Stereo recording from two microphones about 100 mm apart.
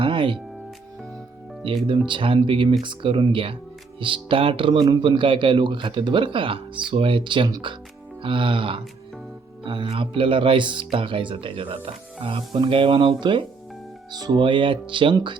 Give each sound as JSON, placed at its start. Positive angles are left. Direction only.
{"t": 0.0, "sound": "music", "side_deg": -55}
{"t": 1.9, "sound": "a man's voice", "side_deg": -55}